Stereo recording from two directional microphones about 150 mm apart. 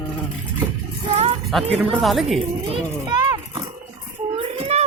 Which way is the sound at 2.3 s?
35° right (ahead or behind).